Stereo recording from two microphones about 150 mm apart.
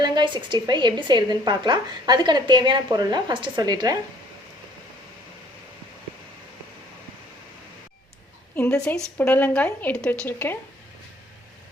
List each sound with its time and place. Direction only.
0.0 s a woman's voice: 30° right (ahead or behind)
8.5 s a woman's voice: 10° left (ahead or behind)